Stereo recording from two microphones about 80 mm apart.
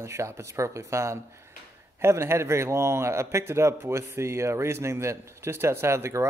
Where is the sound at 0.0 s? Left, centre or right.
Right.